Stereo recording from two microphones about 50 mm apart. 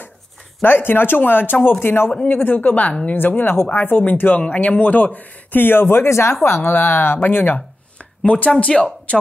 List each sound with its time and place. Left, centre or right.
0.6 s speech: left
6.0 s speech: left
6.4 s speech: left
8.5 s speech: left